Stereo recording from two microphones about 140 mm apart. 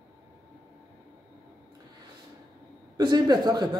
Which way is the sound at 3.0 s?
30° right (ahead or behind).